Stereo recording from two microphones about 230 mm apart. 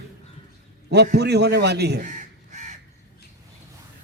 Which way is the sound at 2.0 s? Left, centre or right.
Right.